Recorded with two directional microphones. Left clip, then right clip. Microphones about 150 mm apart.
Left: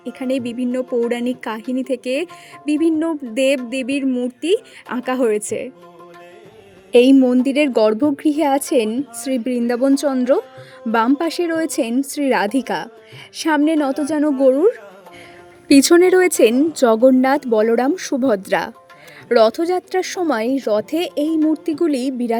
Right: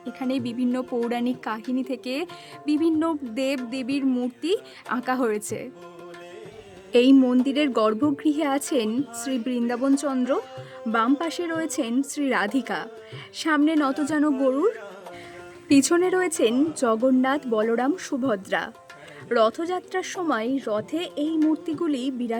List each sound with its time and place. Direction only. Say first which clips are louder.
0.0 s a woman's voice: left 6 dB; 15° left (ahead or behind)
3.3 s a woman's voice: left 10 dB; 20° left (ahead or behind)
6.9 s a woman's voice: left 6 dB; 20° left (ahead or behind)
15.7 s a woman's voice: left 9 dB; 40° left (ahead or behind)